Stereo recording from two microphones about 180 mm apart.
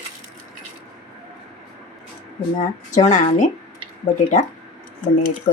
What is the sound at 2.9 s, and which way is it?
Speech, 40° left (ahead or behind).